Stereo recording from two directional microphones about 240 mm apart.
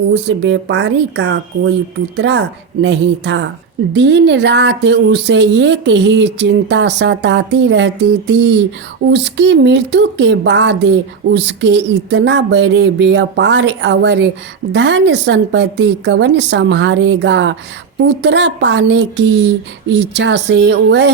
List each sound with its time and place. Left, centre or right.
0.1 s speech: right